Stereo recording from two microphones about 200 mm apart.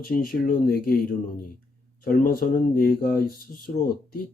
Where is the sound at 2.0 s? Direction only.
45° left (ahead or behind).